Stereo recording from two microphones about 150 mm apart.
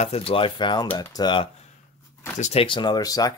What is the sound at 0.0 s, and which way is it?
Speech, 40° left (ahead or behind).